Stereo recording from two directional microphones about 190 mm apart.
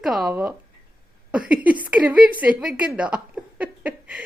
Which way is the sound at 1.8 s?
10° right (ahead or behind).